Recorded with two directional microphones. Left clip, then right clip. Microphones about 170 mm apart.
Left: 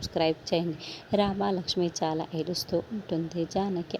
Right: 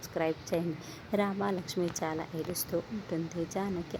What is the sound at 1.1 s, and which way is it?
Speech, 25° left (ahead or behind).